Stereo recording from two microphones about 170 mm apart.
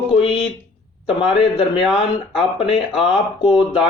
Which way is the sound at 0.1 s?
35° left (ahead or behind).